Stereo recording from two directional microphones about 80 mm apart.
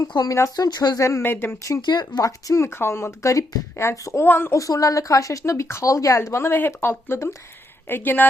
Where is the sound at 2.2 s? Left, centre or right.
Left.